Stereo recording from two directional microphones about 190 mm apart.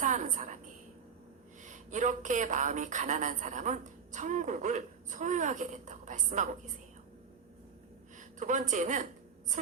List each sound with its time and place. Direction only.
0.0 s a sound: 40° right (ahead or behind)
1.6 s a woman's voice: 40° right (ahead or behind)
8.4 s a woman's voice: 40° right (ahead or behind)